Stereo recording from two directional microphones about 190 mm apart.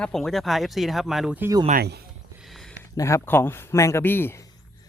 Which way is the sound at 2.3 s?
Centre (ahead or behind).